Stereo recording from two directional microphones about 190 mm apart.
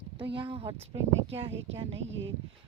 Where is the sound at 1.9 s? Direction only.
75° right (ahead or behind).